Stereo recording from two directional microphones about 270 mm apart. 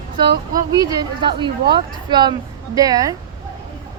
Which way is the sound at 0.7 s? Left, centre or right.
Centre.